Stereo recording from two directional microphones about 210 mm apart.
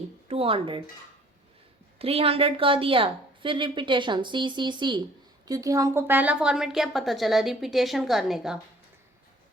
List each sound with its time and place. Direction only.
0.3 s speech: 25° right (ahead or behind)
2.0 s a woman's voice: 25° right (ahead or behind); by 8.5 s centre (ahead or behind)